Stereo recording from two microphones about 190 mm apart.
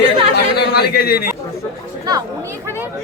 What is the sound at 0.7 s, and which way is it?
Speech, 55° left (ahead or behind).